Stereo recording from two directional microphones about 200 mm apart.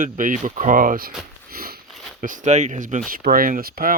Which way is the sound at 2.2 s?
40° right (ahead or behind).